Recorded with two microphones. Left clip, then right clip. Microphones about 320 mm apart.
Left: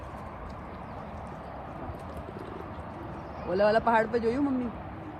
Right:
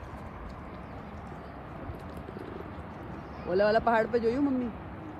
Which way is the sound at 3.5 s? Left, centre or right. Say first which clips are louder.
Left 1 dB; left.